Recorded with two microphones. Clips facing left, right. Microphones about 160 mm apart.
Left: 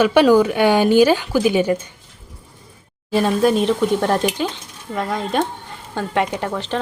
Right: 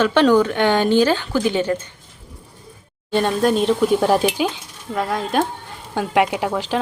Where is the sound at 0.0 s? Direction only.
10° left (ahead or behind).